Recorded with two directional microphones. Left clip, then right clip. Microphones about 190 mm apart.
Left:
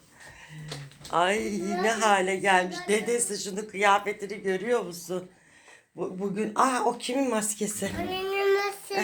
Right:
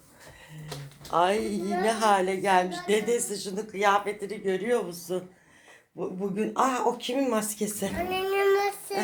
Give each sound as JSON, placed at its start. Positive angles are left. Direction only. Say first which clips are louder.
{"t": 1.1, "sound": "a woman's voice", "louder": "right 1 dB", "side_deg": 5}
{"t": 8.1, "sound": "child singing", "louder": "right 1 dB", "side_deg": -5}